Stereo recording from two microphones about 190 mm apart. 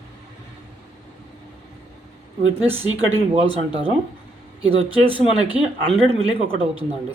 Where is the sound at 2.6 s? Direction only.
30° right (ahead or behind).